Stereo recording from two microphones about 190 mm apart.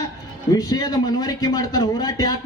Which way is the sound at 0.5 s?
20° left (ahead or behind).